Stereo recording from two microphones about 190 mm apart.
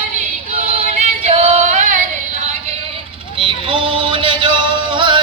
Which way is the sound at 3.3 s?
25° right (ahead or behind).